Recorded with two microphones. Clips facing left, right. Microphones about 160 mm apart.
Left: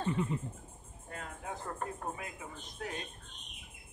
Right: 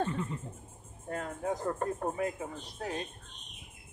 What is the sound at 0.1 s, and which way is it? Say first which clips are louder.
Speech: left 2 dB; 15° left (ahead or behind).